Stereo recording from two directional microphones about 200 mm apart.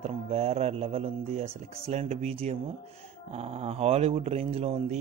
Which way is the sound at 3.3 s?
30° right (ahead or behind).